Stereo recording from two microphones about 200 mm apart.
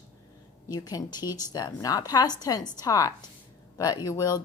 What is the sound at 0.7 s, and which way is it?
A woman's voice, 20° left (ahead or behind).